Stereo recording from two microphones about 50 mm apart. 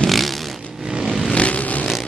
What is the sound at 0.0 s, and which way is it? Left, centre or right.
Vehicle, centre.